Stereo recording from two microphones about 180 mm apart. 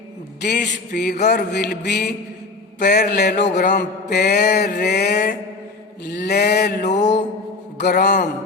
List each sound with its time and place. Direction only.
0.4 s a man's voice: 70° left (ahead or behind)
1.2 s mantra: 65° left (ahead or behind)
3.3 s a man's voice: 40° left (ahead or behind)
3.7 s mantra: 65° left (ahead or behind)
6.8 s a man's voice: 40° left (ahead or behind)
7.8 s a man's voice: 65° left (ahead or behind)